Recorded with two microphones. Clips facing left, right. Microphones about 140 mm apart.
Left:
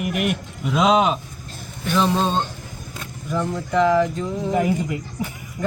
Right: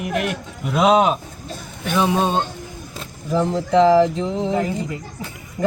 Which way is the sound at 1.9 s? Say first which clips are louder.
Right 1 dB; 10° right (ahead or behind).